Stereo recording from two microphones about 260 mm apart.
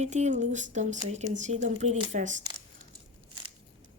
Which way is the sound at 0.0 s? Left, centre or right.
Right.